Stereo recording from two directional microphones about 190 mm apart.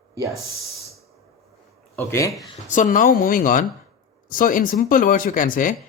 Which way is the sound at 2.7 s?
45° left (ahead or behind).